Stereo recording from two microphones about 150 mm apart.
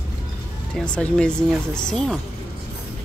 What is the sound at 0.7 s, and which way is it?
Speech, 5° left (ahead or behind).